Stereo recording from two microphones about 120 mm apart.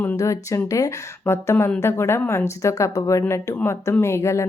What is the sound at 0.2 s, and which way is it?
A woman's voice, 25° left (ahead or behind).